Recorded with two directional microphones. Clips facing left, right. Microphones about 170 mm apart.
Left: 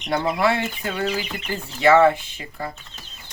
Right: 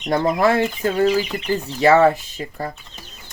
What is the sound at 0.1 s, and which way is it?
Speech, 45° right (ahead or behind).